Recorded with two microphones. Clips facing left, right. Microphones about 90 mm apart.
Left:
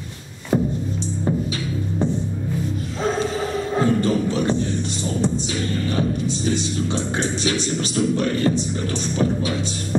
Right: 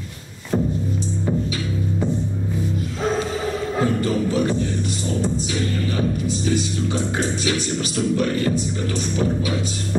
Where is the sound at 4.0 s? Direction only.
30° left (ahead or behind).